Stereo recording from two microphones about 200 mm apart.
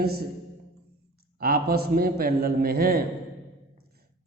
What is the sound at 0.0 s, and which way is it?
Speech, 50° right (ahead or behind).